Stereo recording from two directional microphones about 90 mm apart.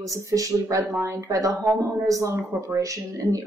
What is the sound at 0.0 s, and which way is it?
A woman's voice, 40° right (ahead or behind).